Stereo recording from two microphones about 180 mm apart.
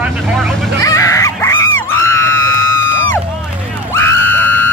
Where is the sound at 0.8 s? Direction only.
15° left (ahead or behind).